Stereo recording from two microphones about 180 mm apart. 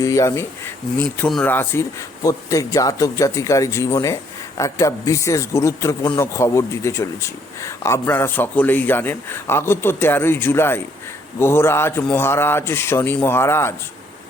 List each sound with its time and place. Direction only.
0.0 s speech: 15° left (ahead or behind)